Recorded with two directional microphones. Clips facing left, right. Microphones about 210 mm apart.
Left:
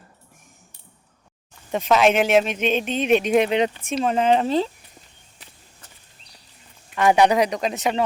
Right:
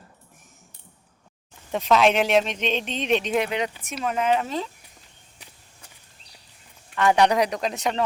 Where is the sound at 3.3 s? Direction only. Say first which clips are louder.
Left 6 dB; 20° left (ahead or behind).